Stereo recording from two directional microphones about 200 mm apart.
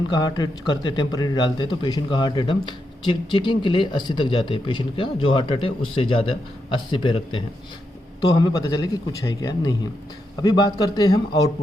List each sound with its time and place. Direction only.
0.1 s speech: 20° left (ahead or behind)